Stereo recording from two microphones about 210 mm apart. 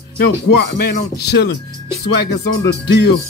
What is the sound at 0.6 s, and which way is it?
Speech, 50° left (ahead or behind).